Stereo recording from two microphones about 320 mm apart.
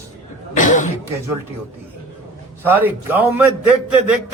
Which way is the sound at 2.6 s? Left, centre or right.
Centre.